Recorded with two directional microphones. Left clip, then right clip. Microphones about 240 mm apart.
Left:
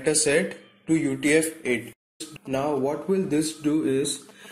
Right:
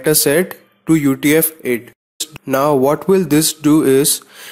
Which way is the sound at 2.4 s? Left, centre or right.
Right.